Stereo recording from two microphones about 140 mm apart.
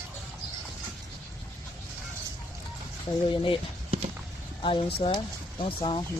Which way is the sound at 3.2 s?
40° left (ahead or behind).